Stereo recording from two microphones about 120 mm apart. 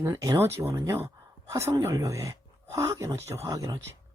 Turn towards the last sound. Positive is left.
turn(degrees=-30)  # may be behind; listen again after turning